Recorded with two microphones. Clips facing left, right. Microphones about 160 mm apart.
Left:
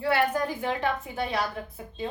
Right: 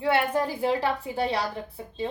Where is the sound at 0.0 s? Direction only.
25° right (ahead or behind).